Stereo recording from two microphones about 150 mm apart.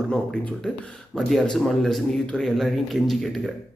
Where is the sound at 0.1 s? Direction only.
5° left (ahead or behind).